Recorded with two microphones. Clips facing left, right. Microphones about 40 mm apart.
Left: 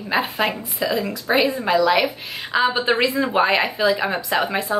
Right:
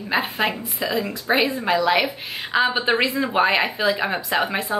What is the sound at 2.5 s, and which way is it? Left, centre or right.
A woman's voice, centre.